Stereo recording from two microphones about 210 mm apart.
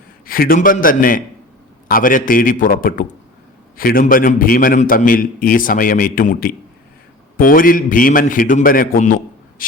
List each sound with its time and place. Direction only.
0.3 s a man's voice: 45° left (ahead or behind)